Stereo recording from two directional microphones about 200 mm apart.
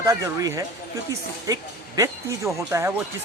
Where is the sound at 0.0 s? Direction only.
15° right (ahead or behind).